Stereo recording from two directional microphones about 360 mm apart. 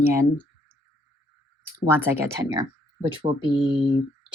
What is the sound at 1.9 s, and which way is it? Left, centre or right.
Speech, centre.